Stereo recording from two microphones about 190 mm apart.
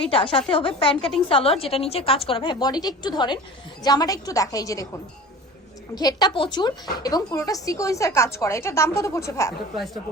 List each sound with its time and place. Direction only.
0.1 s a woman's voice: 30° left (ahead or behind)
5.9 s speech: 20° left (ahead or behind)
9.7 s speech: centre (ahead or behind)